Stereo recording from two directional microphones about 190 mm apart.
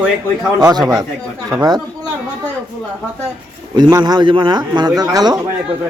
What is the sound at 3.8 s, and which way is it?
A man's voice, 20° right (ahead or behind).